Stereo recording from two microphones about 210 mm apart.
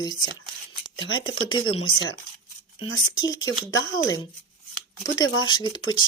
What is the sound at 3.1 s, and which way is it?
Speech, 20° left (ahead or behind).